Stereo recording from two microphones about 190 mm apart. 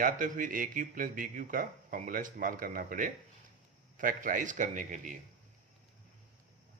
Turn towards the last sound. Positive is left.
turn(degrees=-40)  # may be behind; listen again after turning